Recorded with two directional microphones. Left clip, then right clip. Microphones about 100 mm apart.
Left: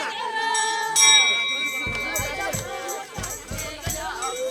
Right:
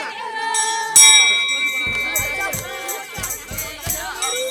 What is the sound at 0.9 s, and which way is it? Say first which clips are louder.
Music: right 5 dB; 30° right (ahead or behind).